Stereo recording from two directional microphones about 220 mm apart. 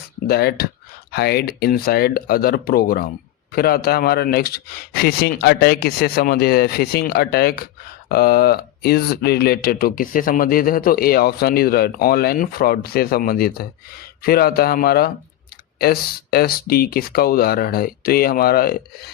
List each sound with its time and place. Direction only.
0.3 s speech: 45° left (ahead or behind)